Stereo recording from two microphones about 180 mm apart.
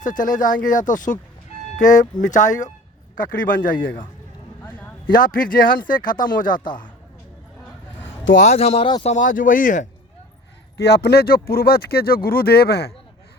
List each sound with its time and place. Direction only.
0.0 s speech: 45° left (ahead or behind)
5.1 s speech: 50° left (ahead or behind)
8.2 s a man's voice: 85° left
8.4 s speech: 35° left (ahead or behind)
10.8 s speech: 65° left (ahead or behind)